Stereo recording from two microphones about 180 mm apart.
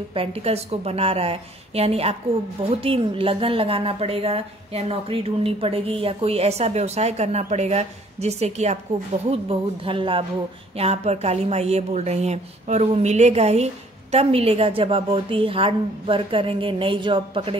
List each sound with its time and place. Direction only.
0.1 s a woman's voice: 30° right (ahead or behind)